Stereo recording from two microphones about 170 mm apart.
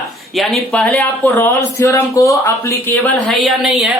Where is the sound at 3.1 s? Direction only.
Centre (ahead or behind).